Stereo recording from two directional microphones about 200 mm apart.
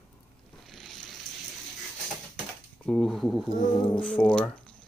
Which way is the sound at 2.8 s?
Centre (ahead or behind).